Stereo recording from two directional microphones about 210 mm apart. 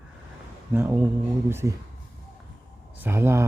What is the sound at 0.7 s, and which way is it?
Speech, 10° right (ahead or behind).